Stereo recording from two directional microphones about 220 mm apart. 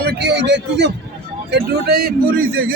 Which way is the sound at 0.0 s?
50° right (ahead or behind).